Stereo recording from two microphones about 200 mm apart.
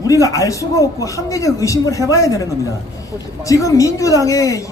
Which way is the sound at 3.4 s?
15° left (ahead or behind).